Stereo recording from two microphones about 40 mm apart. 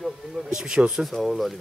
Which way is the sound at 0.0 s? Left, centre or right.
Centre.